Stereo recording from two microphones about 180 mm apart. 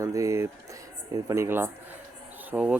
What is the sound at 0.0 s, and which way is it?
Speech, 15° right (ahead or behind).